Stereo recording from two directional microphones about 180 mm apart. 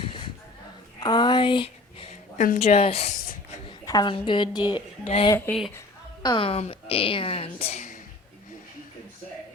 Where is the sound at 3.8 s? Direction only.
25° left (ahead or behind).